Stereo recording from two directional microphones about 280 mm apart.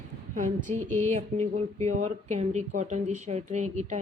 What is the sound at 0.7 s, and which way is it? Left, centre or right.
Music, centre.